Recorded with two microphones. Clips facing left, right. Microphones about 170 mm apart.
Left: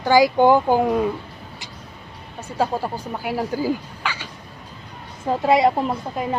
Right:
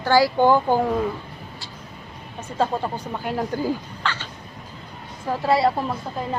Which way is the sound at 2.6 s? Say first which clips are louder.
Left 1 dB; 10° left (ahead or behind).